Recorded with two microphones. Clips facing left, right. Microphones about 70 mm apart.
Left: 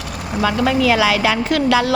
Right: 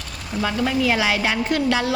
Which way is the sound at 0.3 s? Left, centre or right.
Left.